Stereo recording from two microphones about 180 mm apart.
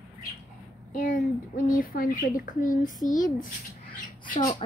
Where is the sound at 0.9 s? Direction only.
50° left (ahead or behind).